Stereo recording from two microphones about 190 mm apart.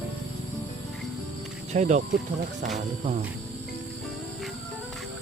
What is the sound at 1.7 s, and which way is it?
Speech, 40° right (ahead or behind).